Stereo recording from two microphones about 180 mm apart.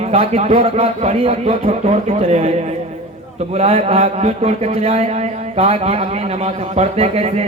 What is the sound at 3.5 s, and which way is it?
A man's voice, 35° right (ahead or behind).